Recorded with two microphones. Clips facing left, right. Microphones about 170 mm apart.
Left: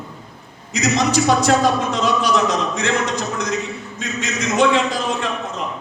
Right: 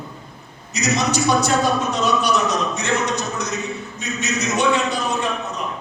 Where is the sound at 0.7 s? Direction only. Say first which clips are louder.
Left 3 dB; 90° left.